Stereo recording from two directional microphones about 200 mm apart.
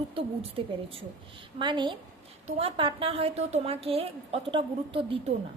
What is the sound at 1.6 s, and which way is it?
A woman's voice, 25° right (ahead or behind).